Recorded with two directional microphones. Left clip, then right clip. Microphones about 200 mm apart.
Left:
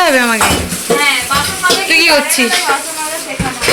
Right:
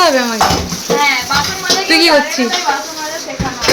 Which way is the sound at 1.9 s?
15° right (ahead or behind).